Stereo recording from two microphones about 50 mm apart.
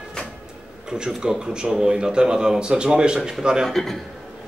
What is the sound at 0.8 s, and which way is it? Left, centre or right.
Speech, centre.